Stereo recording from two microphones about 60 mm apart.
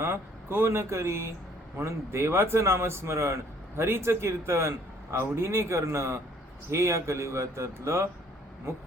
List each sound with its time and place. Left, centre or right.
0.0 s speech: right